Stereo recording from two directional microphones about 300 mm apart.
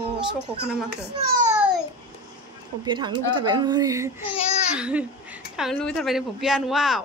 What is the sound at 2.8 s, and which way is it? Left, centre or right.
A woman's voice, centre.